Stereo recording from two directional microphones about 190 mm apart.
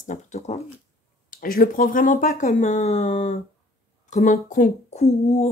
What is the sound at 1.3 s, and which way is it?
Speech, 50° left (ahead or behind).